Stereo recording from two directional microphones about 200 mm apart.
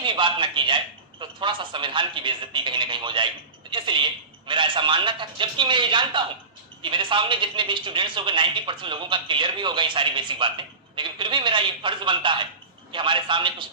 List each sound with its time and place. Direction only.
0.0 s a man's voice: 25° right (ahead or behind)